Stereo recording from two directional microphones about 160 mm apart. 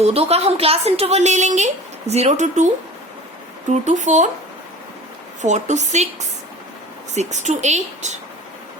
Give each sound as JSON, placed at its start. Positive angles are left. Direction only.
{"t": 0.0, "sound": "a woman's voice", "side_deg": -40}
{"t": 3.7, "sound": "speech", "side_deg": -50}
{"t": 5.4, "sound": "speech", "side_deg": -50}
{"t": 7.1, "sound": "speech", "side_deg": -45}